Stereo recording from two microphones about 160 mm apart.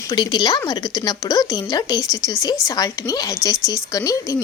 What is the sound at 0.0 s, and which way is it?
Speech, 25° left (ahead or behind).